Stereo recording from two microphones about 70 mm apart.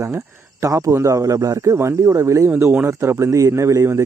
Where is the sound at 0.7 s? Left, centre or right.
Right.